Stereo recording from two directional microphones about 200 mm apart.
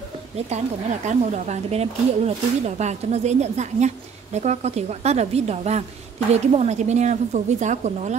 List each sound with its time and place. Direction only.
1.0 s speech: 35° right (ahead or behind)